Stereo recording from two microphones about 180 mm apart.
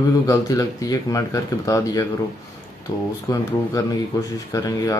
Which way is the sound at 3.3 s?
20° left (ahead or behind).